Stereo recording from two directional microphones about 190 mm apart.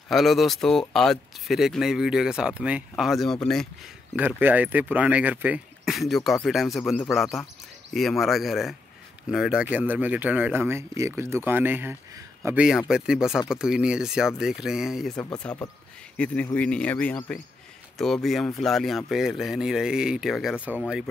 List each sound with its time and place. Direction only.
0.1 s speech: centre (ahead or behind)
4.1 s speech: 10° right (ahead or behind)